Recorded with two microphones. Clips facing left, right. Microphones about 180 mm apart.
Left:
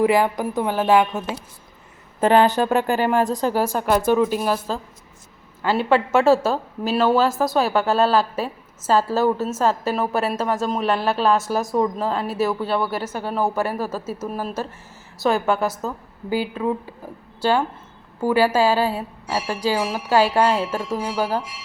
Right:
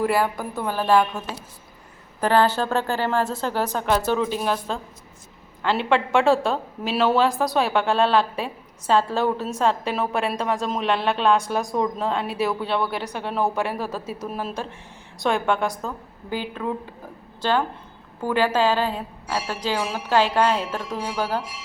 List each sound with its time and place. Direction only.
0.0 s a woman's voice: 15° left (ahead or behind)
2.2 s a woman's voice: 20° left (ahead or behind)